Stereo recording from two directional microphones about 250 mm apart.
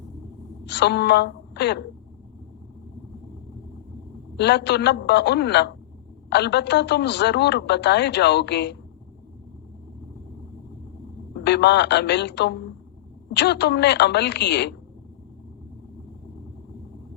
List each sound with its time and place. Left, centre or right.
0.7 s a woman's voice: left
4.4 s a woman's voice: left
11.3 s a woman's voice: left